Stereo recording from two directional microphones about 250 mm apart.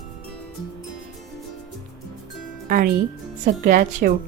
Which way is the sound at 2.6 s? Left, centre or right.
Right.